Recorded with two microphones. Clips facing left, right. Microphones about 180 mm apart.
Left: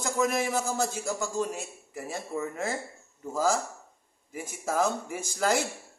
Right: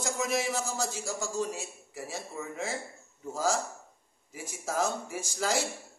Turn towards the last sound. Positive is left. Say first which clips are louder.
# left 3 dB
turn(degrees=55)  # may be behind; listen again after turning